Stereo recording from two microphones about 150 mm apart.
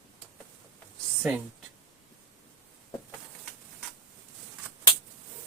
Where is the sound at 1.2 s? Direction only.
10° right (ahead or behind).